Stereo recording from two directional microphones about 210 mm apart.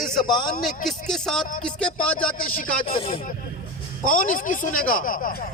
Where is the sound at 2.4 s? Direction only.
40° left (ahead or behind).